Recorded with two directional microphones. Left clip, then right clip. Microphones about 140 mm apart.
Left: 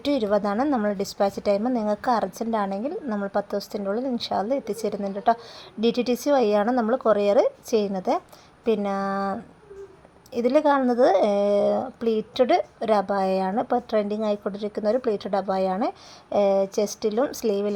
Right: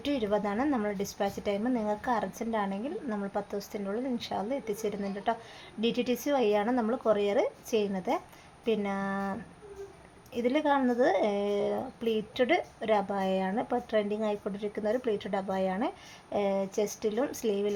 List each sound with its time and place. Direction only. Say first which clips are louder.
0.0 s a woman's voice: left 7 dB; 30° left (ahead or behind)